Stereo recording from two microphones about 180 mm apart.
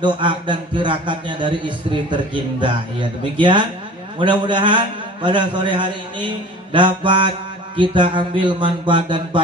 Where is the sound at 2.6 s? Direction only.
25° right (ahead or behind).